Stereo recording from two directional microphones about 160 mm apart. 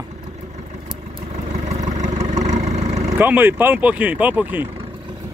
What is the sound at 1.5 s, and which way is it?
Vehicle, 45° right (ahead or behind).